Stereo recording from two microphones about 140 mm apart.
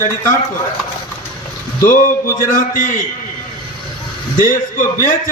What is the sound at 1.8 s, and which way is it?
A man's voice, 75° left (ahead or behind).